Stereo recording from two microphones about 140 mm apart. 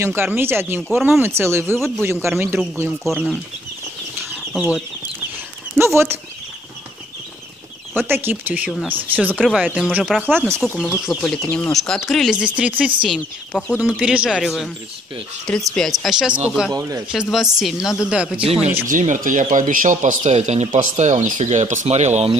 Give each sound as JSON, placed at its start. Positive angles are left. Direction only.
{"t": 0.0, "sound": "speech", "side_deg": -15}
{"t": 0.8, "sound": "speech", "side_deg": 0}
{"t": 1.2, "sound": "speech", "side_deg": -20}
{"t": 2.9, "sound": "speech", "side_deg": 0}
{"t": 4.6, "sound": "speech", "side_deg": -10}
{"t": 8.1, "sound": "speech", "side_deg": -15}
{"t": 10.7, "sound": "speech", "side_deg": 15}
{"t": 11.1, "sound": "speech", "side_deg": 0}
{"t": 11.4, "sound": "speech", "side_deg": 15}
{"t": 16.7, "sound": "speech", "side_deg": -25}
{"t": 17.1, "sound": "speech", "side_deg": -5}
{"t": 18.9, "sound": "speech", "side_deg": -70}